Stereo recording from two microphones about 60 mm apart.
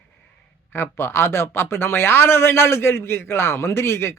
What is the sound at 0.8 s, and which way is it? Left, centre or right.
Speech, left.